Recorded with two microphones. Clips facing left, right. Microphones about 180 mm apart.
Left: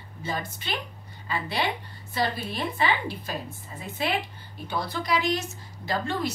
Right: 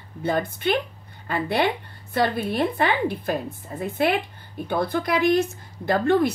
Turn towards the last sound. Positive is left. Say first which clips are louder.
# right 9 dB
turn(degrees=-55)  # may be behind; listen again after turning